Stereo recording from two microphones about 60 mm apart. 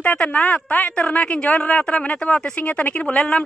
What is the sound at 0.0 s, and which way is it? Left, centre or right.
A man's voice, left.